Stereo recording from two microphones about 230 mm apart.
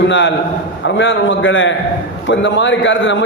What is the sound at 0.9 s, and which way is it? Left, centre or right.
A man's voice, left.